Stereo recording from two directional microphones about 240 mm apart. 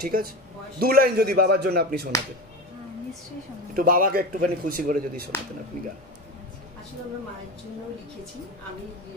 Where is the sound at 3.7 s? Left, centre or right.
Right.